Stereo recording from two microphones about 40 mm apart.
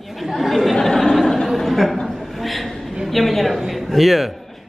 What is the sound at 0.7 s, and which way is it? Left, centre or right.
Chatter, centre.